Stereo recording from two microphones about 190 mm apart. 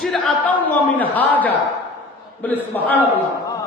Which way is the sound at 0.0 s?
5° left (ahead or behind).